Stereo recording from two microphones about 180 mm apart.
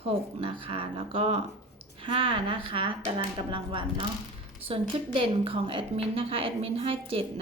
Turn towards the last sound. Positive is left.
turn(degrees=-30)  # may be behind; listen again after turning